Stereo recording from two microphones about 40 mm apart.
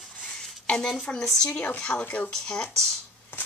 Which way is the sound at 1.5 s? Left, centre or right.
Left.